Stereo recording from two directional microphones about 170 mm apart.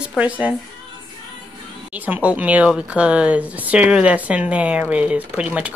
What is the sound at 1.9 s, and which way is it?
Speech, 10° right (ahead or behind).